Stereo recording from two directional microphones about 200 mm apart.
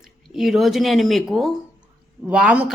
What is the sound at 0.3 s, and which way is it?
A woman's voice, centre (ahead or behind).